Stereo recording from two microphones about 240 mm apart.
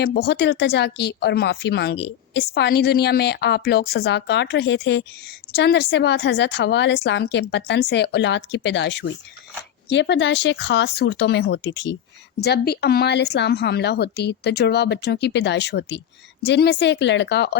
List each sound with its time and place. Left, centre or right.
0.0 s speech: left